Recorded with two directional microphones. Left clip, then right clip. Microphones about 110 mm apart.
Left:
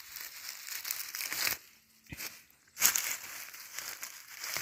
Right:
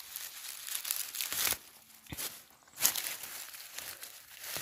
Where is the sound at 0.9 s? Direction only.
35° right (ahead or behind).